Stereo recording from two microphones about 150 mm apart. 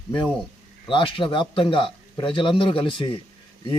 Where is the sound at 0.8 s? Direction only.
35° left (ahead or behind).